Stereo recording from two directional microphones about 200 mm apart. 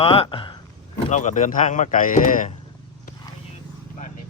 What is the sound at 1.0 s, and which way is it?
Speech, 35° left (ahead or behind).